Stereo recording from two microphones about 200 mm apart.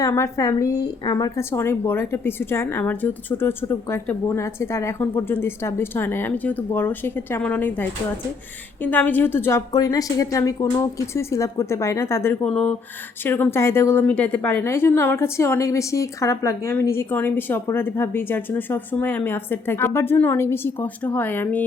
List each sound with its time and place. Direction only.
0.0 s a woman's voice: 15° left (ahead or behind)